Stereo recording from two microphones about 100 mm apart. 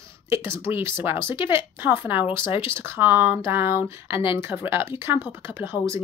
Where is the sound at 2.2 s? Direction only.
55° left (ahead or behind).